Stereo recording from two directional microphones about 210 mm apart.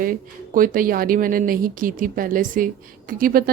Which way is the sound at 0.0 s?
40° right (ahead or behind).